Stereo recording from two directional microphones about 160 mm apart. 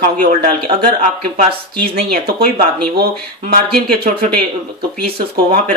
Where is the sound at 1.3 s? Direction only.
70° right (ahead or behind).